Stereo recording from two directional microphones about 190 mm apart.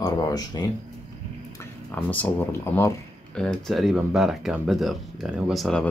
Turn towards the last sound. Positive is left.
turn(degrees=5)  # may be behind; listen again after turning